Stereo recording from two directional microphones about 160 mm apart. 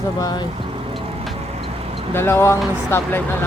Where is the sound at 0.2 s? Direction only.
25° left (ahead or behind).